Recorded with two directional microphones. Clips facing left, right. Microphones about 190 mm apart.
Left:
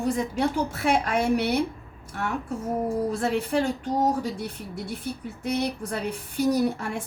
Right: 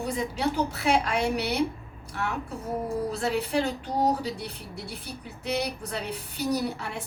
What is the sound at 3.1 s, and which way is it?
A woman's voice, 50° left (ahead or behind).